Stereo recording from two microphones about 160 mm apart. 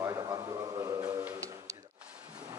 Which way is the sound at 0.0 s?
20° right (ahead or behind).